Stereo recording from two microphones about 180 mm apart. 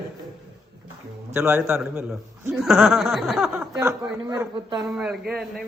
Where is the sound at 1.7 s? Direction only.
5° right (ahead or behind).